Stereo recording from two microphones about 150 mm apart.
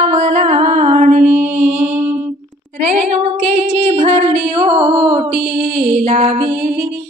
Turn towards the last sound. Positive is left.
turn(degrees=-45)  # may be behind; listen again after turning